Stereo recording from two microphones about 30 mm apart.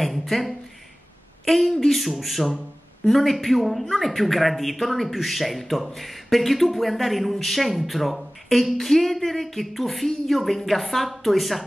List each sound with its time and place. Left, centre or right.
0.3 s a woman's voice: centre